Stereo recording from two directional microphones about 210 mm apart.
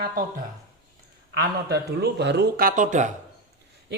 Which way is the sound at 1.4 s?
50° right (ahead or behind).